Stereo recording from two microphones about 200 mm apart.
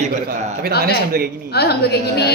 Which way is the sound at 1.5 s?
55° left (ahead or behind).